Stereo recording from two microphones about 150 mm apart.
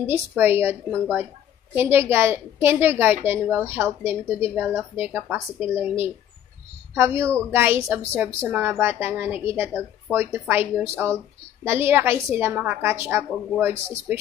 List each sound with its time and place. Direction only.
0.0 s a woman's voice: 15° right (ahead or behind)